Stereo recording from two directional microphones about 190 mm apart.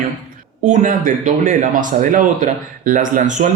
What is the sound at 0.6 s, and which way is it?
Speech, 40° right (ahead or behind).